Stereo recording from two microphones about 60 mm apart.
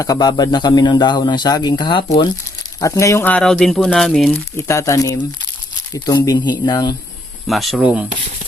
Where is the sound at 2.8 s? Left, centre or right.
Left.